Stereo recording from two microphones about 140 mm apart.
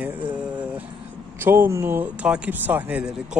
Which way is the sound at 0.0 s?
10° right (ahead or behind).